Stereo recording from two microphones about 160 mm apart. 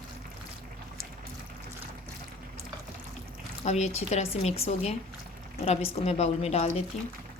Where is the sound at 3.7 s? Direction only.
45° left (ahead or behind).